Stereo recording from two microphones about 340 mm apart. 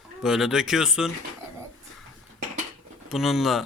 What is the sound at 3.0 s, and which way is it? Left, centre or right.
Speech, centre.